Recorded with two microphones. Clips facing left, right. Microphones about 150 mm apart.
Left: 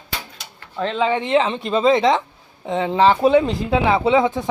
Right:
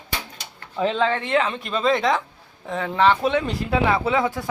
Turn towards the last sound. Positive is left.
turn(degrees=20)  # may be behind; listen again after turning